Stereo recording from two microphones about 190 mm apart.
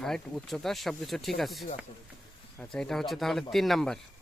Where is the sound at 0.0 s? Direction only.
Centre (ahead or behind).